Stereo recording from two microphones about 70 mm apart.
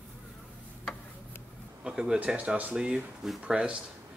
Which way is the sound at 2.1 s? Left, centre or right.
Centre.